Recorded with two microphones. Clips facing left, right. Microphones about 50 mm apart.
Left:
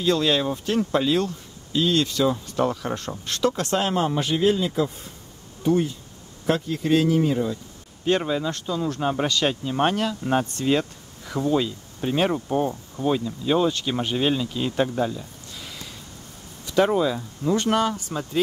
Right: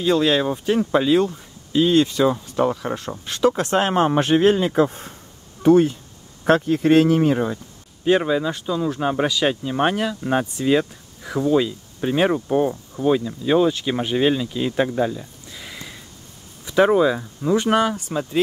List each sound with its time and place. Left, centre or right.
0.0 s speech: centre
3.8 s speech: right
8.0 s speech: centre